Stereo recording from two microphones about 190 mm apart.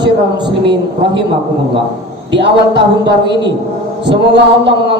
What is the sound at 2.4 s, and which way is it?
Speech, 65° right (ahead or behind).